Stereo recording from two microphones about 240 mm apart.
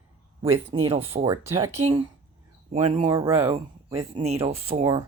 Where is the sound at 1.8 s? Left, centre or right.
Right.